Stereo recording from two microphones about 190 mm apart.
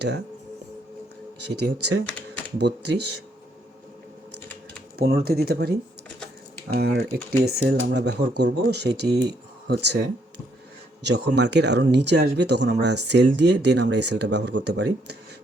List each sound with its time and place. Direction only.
1.4 s speech: 65° right (ahead or behind)
4.9 s speech: 55° right (ahead or behind)
6.7 s speech: 55° right (ahead or behind)